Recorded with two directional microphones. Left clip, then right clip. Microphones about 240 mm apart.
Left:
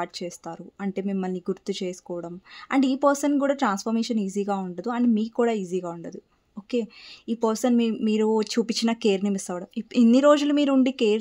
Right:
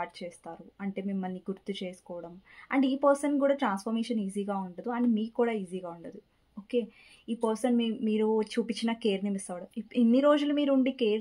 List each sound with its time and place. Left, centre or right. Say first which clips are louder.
0.0 s speech: left 6 dB; left